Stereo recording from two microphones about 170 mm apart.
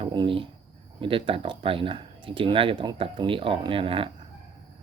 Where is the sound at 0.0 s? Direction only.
30° right (ahead or behind).